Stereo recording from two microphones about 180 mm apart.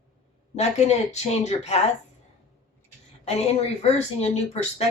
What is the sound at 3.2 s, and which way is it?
Speech, 35° left (ahead or behind).